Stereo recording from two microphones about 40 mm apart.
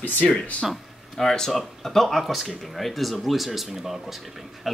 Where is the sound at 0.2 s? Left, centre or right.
Left.